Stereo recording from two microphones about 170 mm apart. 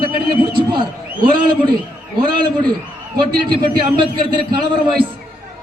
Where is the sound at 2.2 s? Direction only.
30° right (ahead or behind).